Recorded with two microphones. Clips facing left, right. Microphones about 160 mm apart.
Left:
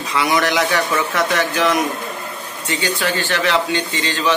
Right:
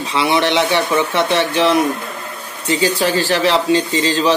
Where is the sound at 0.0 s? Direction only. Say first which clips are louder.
Right 2 dB; 30° right (ahead or behind).